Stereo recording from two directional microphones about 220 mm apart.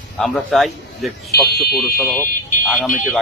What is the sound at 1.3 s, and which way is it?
Speech, 45° left (ahead or behind).